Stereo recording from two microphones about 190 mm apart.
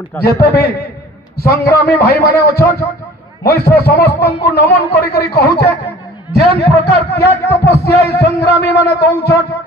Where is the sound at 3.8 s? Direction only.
55° left (ahead or behind).